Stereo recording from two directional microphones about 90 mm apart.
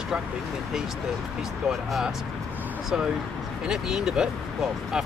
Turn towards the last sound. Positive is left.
turn(degrees=-5)  # may be behind; listen again after turning